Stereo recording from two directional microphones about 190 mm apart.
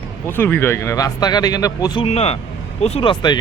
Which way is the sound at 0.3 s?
10° left (ahead or behind).